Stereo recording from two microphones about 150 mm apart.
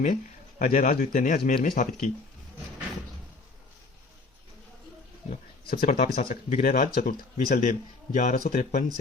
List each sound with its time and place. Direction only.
0.6 s a man's voice: 60° left (ahead or behind)
5.6 s a man's voice: 80° left; by 8.8 s 60° left (ahead or behind)